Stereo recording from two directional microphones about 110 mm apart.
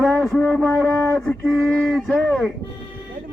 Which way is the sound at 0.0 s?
Centre (ahead or behind).